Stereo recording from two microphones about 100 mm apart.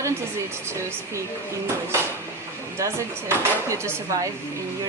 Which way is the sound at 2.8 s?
30° right (ahead or behind).